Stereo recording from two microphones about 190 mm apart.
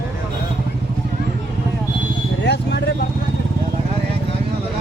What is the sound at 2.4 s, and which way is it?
Vehicle, 60° left (ahead or behind).